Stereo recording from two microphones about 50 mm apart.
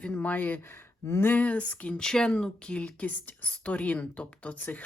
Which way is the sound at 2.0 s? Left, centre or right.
Centre.